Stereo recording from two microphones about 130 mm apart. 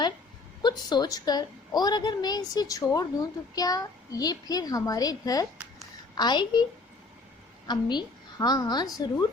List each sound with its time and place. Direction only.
0.6 s a woman's voice: 35° left (ahead or behind)
7.7 s a woman's voice: 35° left (ahead or behind)